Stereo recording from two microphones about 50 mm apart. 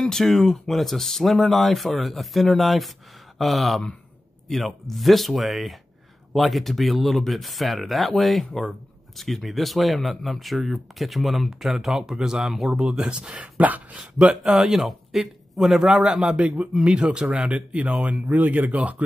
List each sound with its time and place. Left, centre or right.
0.0 s speech: centre; by 14.4 s right
14.4 s speech: centre
16.0 s speech: right